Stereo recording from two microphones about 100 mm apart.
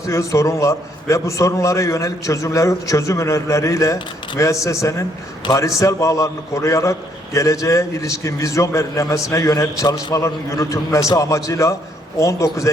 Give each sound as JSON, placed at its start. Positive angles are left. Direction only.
{"t": 0.0, "sound": "a man's voice", "side_deg": 30}